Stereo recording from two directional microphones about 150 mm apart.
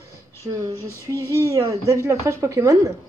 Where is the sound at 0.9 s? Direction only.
15° left (ahead or behind).